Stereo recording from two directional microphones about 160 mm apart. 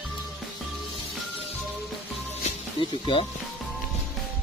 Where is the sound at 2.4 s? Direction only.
35° left (ahead or behind).